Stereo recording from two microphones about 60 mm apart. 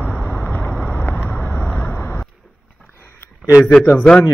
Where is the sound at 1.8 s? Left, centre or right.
Left.